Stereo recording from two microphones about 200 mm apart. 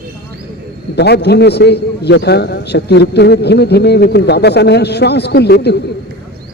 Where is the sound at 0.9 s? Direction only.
55° left (ahead or behind).